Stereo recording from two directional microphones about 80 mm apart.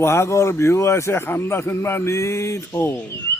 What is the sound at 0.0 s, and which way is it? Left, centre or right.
A man's voice, left.